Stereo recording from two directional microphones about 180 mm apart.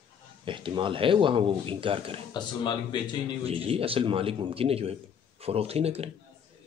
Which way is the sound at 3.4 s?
30° right (ahead or behind).